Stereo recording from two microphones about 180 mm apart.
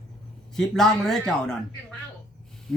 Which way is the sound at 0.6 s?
Centre (ahead or behind).